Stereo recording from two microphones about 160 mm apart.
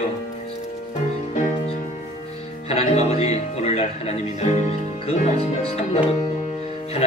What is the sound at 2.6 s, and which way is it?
Music, 40° left (ahead or behind).